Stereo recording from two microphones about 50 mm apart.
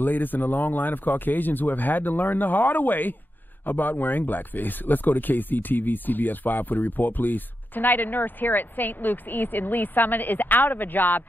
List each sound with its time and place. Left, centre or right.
0.0 s speech: left